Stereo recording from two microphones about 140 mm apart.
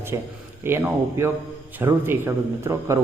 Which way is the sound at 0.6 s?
15° right (ahead or behind).